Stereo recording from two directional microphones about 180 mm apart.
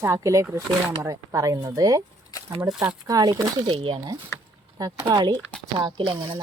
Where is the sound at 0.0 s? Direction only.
15° right (ahead or behind).